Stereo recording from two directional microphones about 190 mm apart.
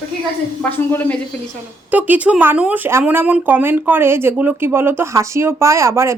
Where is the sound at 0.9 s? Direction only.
10° left (ahead or behind).